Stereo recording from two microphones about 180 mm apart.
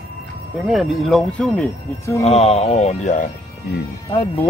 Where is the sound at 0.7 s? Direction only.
Centre (ahead or behind).